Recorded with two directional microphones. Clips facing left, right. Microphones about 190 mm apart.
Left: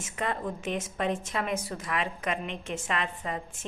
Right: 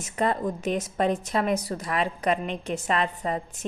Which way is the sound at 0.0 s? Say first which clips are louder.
Right 6 dB; 40° right (ahead or behind).